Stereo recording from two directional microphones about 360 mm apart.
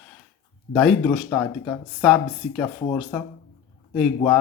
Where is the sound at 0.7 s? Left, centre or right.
Centre.